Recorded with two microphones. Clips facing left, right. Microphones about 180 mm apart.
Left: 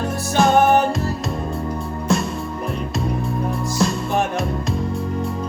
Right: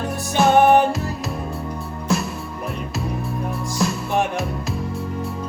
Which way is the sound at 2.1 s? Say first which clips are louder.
Left 2 dB; centre (ahead or behind).